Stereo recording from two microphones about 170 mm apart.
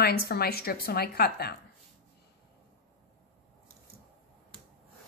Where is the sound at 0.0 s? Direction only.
65° left (ahead or behind).